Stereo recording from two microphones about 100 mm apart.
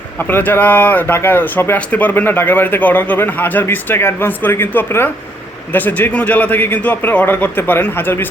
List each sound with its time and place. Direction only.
0.2 s speech: 20° left (ahead or behind)